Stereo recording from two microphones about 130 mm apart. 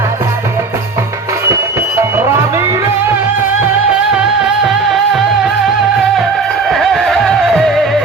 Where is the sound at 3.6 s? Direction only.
10° right (ahead or behind).